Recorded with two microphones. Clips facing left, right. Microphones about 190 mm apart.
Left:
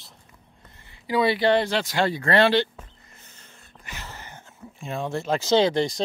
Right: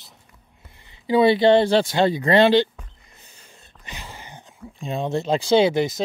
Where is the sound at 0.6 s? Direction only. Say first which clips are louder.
Right 7 dB; 15° right (ahead or behind).